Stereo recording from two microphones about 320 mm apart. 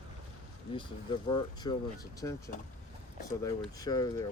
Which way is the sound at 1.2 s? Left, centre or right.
Centre.